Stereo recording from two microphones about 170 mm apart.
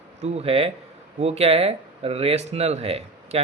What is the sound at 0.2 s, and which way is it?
Speech, 35° right (ahead or behind).